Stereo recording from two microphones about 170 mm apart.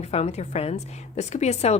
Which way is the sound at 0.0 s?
40° left (ahead or behind).